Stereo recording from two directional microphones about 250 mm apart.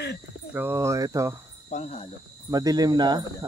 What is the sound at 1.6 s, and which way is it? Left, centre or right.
Speech, left.